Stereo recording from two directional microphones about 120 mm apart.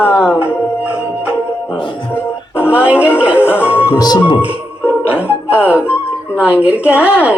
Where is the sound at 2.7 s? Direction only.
10° right (ahead or behind).